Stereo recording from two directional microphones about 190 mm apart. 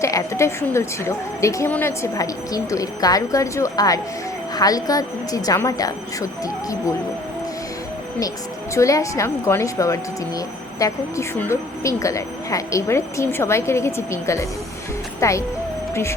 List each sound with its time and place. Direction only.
0.0 s speech: 15° left (ahead or behind)
8.7 s speech: 15° left (ahead or behind)